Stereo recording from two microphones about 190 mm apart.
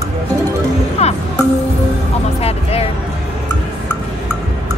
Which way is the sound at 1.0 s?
35° left (ahead or behind).